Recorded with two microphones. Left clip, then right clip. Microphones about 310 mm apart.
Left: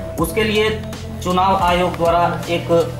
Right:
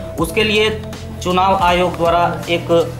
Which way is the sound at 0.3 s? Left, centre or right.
Centre.